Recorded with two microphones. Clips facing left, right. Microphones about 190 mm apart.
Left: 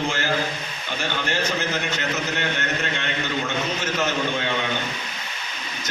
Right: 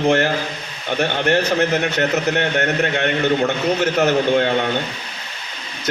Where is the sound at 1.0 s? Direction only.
60° right (ahead or behind).